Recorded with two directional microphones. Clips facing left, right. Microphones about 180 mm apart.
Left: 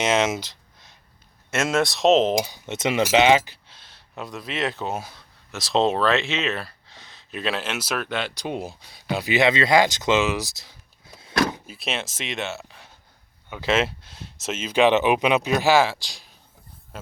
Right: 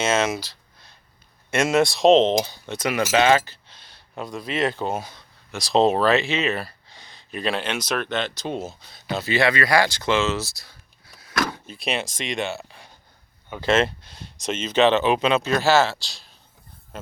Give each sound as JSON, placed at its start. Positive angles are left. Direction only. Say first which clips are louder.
{"t": 0.0, "sound": "speech", "louder": "even", "side_deg": 15}
{"t": 1.5, "sound": "speech", "louder": "right 3 dB", "side_deg": 0}
{"t": 3.7, "sound": "speech", "louder": "right 1 dB", "side_deg": 0}
{"t": 11.6, "sound": "speech", "louder": "right 3 dB", "side_deg": 5}
{"t": 16.9, "sound": "a sound", "louder": "right 2 dB", "side_deg": 5}